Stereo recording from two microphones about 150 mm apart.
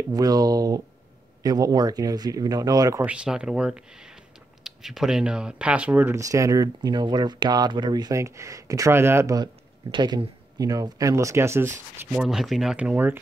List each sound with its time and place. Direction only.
0.1 s speech: 25° right (ahead or behind)
3.0 s speech: 5° right (ahead or behind)
12.1 s speech: 5° right (ahead or behind)